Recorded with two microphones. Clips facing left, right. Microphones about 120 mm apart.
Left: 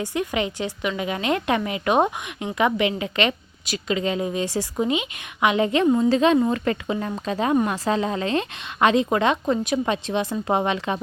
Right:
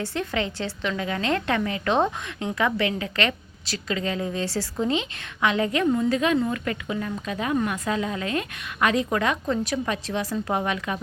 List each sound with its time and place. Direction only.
0.0 s a woman's voice: 15° left (ahead or behind)